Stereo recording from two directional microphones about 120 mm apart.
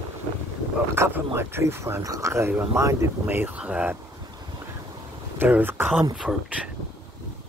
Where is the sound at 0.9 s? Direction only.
20° right (ahead or behind).